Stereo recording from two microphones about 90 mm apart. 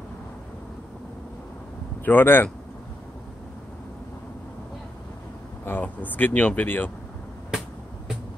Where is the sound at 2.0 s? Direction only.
20° left (ahead or behind).